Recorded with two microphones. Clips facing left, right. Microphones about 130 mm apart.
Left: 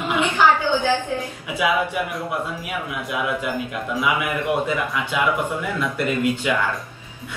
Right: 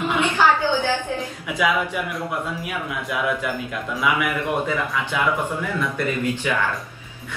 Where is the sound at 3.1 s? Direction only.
20° left (ahead or behind).